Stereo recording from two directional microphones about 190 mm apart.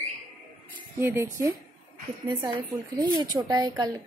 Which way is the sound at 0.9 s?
10° right (ahead or behind).